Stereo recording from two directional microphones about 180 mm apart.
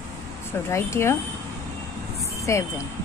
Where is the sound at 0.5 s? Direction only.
15° left (ahead or behind).